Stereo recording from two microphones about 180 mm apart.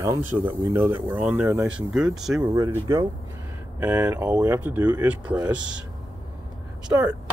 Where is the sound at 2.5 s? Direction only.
20° right (ahead or behind).